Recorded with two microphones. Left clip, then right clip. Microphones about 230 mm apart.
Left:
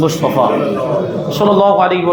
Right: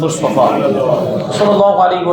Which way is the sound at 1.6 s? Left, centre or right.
Left.